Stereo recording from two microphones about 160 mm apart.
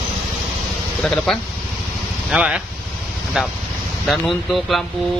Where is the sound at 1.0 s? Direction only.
5° left (ahead or behind).